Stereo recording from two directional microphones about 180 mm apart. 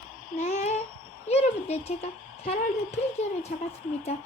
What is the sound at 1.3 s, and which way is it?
Speech, 35° left (ahead or behind).